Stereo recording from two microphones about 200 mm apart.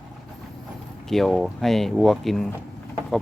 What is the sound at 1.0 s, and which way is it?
Speech, centre (ahead or behind).